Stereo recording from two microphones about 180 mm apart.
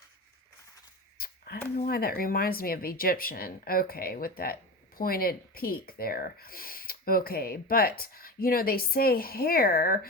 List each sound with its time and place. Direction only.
1.2 s speech: 55° left (ahead or behind)